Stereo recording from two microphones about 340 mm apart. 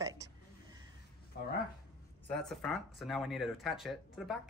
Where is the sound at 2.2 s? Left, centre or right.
Centre.